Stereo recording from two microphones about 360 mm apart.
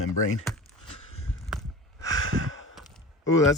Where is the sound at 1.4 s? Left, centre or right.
Centre.